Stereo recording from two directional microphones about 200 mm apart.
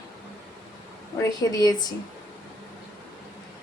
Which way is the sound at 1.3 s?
20° left (ahead or behind).